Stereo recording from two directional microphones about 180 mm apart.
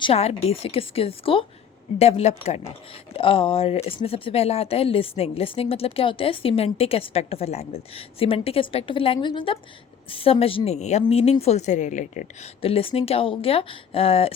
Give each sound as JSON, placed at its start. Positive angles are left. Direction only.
{"t": 0.0, "sound": "speech", "side_deg": 35}